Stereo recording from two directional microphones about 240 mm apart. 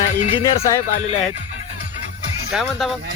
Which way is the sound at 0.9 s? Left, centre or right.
Left.